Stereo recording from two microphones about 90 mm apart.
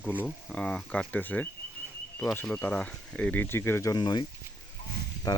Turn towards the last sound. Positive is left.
turn(degrees=40)  # may be behind; listen again after turning